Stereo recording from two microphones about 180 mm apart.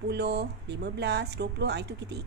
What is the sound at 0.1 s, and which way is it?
Speech, 70° right (ahead or behind).